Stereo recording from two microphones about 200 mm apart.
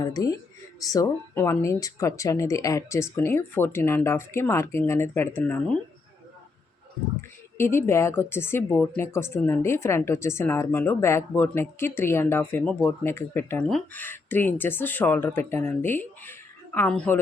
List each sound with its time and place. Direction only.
0.0 s a woman's voice: 15° left (ahead or behind)
7.2 s a woman's voice: 10° left (ahead or behind)